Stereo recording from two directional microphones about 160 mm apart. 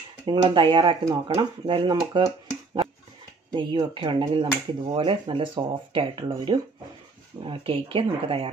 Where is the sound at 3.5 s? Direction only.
30° right (ahead or behind).